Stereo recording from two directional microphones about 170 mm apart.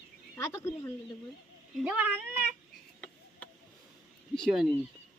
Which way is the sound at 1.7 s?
5° right (ahead or behind).